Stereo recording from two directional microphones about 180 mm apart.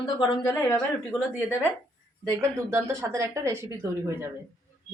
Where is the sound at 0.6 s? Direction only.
15° left (ahead or behind).